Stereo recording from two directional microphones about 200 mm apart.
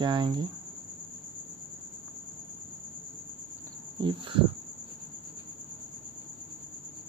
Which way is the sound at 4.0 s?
25° right (ahead or behind).